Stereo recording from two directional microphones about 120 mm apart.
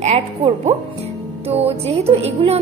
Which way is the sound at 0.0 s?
70° right (ahead or behind).